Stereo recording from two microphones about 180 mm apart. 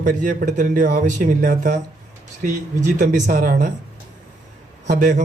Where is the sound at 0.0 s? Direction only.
45° right (ahead or behind).